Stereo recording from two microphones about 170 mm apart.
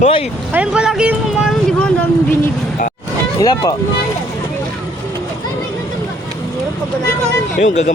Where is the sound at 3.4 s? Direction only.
25° left (ahead or behind).